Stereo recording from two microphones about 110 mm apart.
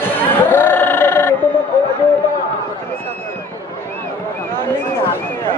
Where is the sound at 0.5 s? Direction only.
20° left (ahead or behind).